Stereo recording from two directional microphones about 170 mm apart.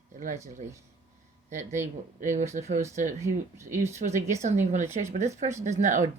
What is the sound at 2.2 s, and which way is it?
Speech, 45° right (ahead or behind).